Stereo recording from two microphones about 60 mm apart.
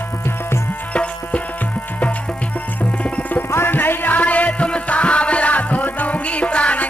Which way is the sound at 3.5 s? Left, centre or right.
Left.